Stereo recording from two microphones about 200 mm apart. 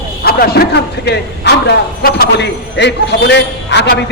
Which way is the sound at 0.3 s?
50° left (ahead or behind).